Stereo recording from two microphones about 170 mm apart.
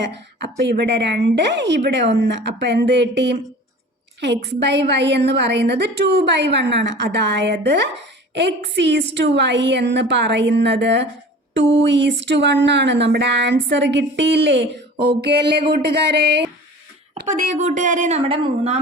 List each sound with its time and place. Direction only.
0.6 s speech: 80° right
2.2 s a sound: 80° right
17.2 s a woman's voice: 45° right (ahead or behind)